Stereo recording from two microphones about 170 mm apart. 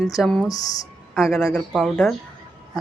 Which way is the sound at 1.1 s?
Centre (ahead or behind).